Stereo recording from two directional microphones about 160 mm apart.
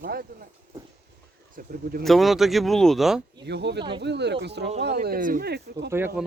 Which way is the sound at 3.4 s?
90° right.